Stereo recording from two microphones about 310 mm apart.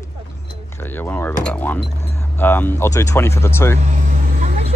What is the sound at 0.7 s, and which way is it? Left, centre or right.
Speech, centre.